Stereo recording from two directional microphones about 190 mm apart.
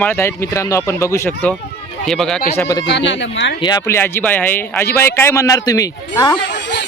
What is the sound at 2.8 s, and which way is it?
Speech, 70° left (ahead or behind).